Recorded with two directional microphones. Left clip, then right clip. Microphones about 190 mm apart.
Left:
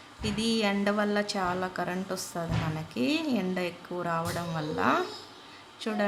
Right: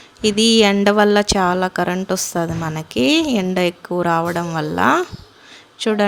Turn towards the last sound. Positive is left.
turn(degrees=-40)  # may be behind; listen again after turning